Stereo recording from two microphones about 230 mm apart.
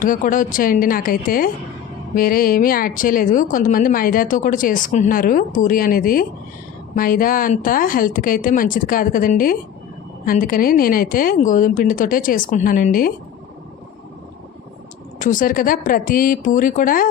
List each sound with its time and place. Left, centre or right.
0.0 s speech: left
15.2 s speech: left